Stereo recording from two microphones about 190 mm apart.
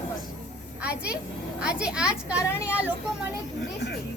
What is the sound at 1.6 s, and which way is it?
Speech, 5° right (ahead or behind).